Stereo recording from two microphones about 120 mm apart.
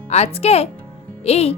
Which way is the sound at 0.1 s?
60° left (ahead or behind).